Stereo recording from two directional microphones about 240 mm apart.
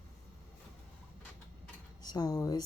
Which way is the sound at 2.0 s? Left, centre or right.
Centre.